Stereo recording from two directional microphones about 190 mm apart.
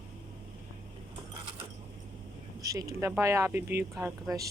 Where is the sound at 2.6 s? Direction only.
15° right (ahead or behind).